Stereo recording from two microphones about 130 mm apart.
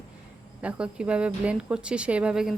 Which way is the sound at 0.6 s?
10° right (ahead or behind).